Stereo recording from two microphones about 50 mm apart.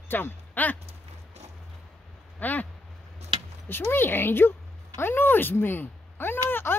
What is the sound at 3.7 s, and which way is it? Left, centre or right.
Speech, left.